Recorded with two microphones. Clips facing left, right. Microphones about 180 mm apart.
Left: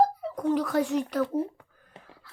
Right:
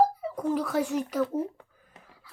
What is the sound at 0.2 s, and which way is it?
A child's voice, 5° right (ahead or behind).